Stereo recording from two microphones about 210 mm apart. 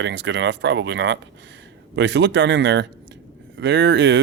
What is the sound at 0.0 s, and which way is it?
Speech, 55° right (ahead or behind).